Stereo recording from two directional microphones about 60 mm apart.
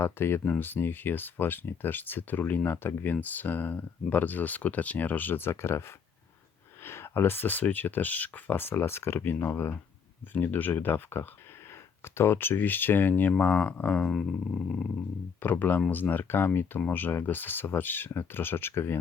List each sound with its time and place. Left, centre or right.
0.0 s speech: left
6.8 s speech: left
10.3 s speech: left
15.4 s speech: left